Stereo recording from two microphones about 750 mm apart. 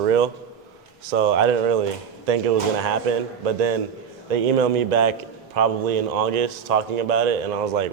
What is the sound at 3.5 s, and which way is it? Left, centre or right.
Speech, right.